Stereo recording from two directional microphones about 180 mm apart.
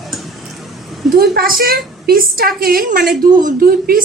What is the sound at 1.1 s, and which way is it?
A woman's voice, 60° right (ahead or behind).